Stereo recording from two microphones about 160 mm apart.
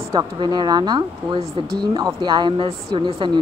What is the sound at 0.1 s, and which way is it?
Speech, 25° right (ahead or behind).